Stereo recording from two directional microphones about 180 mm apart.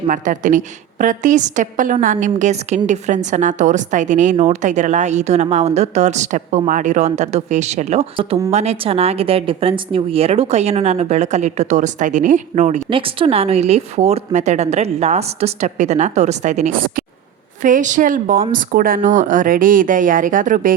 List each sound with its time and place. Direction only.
0.1 s a woman's voice: 45° right (ahead or behind)
12.9 s a woman's voice: 30° right (ahead or behind); by 20.7 s 45° right (ahead or behind)